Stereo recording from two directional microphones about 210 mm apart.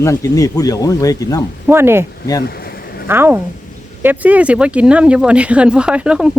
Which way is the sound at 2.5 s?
45° left (ahead or behind).